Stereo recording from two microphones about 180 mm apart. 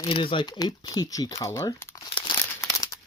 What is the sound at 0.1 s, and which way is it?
Speech, 30° left (ahead or behind).